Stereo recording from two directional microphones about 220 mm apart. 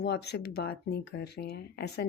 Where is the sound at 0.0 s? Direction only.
50° left (ahead or behind).